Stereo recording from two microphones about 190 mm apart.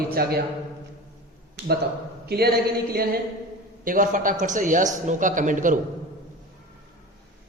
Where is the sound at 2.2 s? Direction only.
55° right (ahead or behind).